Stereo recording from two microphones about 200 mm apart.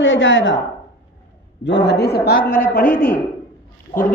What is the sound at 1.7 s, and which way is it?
A man's voice, 60° left (ahead or behind).